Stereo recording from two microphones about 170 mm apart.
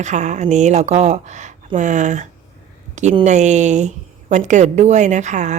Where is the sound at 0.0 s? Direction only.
45° right (ahead or behind).